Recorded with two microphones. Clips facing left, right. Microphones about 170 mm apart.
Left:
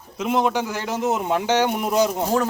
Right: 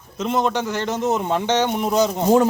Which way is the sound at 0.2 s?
10° left (ahead or behind).